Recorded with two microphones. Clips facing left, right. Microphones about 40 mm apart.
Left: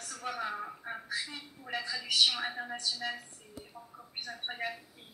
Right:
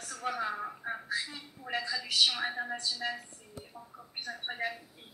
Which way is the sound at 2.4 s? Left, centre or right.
Centre.